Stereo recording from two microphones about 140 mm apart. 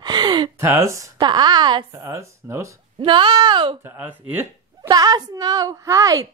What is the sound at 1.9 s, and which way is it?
Speech, 20° right (ahead or behind).